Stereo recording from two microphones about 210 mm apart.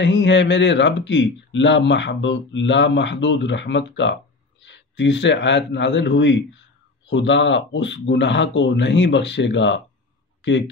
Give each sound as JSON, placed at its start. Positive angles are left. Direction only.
{"t": 0.0, "sound": "speech", "side_deg": 60}